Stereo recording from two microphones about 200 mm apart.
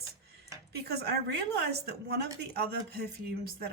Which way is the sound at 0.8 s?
55° right (ahead or behind).